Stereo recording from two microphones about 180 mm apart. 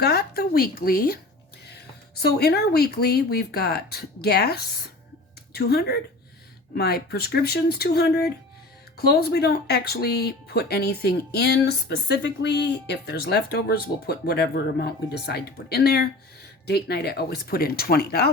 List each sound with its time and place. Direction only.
0.0 s speech: 60° left (ahead or behind)